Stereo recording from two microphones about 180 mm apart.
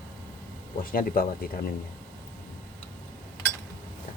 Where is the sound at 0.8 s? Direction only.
55° left (ahead or behind).